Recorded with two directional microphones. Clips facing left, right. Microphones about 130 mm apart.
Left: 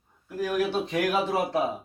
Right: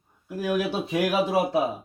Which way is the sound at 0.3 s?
15° right (ahead or behind).